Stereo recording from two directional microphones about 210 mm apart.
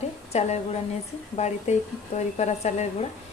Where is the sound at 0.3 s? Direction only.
30° left (ahead or behind).